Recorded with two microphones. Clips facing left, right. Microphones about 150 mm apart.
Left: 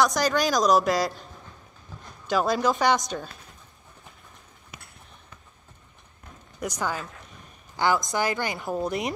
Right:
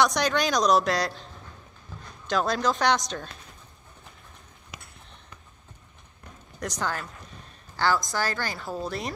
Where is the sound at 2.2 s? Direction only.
5° left (ahead or behind).